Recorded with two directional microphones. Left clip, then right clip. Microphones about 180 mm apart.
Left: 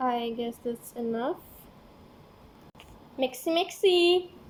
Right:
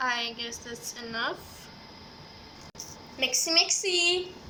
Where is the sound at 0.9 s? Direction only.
55° left (ahead or behind).